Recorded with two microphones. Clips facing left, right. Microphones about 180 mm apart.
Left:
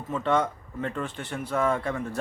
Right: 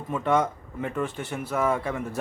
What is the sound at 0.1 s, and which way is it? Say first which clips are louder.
A man's voice: right 1 dB; 10° right (ahead or behind).